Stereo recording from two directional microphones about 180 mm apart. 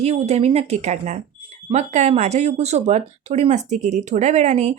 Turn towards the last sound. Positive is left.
turn(degrees=-40)  # may be behind; listen again after turning